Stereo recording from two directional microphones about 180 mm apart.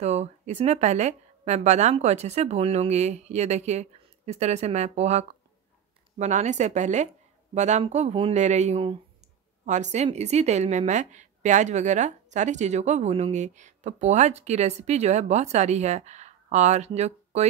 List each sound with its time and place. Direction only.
0.0 s a woman's voice: 35° right (ahead or behind)